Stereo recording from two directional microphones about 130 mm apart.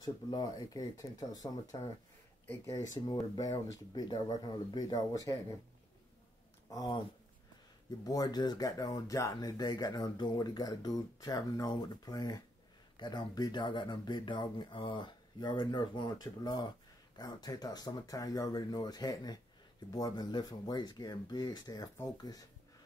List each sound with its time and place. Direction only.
0.0 s speech: 30° left (ahead or behind)
2.4 s speech: 15° left (ahead or behind)
2.7 s speech: 30° left (ahead or behind)
6.7 s speech: 30° left (ahead or behind)
8.0 s speech: 30° left (ahead or behind)